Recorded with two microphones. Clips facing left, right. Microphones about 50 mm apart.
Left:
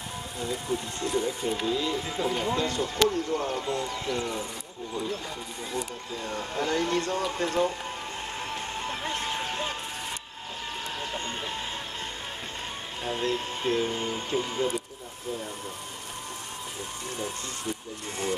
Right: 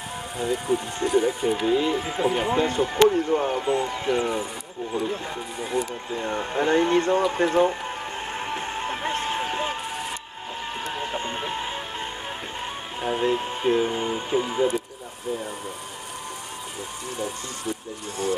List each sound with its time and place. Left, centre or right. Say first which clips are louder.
0.4 s speech: right 7 dB; right
8.4 s music: right 5 dB; right
11.0 s vehicle: right 5 dB; centre
13.0 s speech: right 6 dB; centre